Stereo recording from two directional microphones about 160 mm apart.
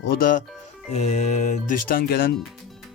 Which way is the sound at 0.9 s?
45° left (ahead or behind).